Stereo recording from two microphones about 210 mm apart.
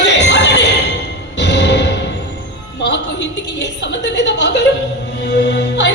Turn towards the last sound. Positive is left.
turn(degrees=55)  # may be behind; listen again after turning